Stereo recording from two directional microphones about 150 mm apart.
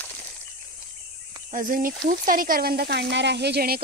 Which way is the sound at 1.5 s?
65° right (ahead or behind).